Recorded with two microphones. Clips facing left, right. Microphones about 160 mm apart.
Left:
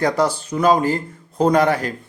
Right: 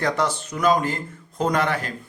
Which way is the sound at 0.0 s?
35° left (ahead or behind).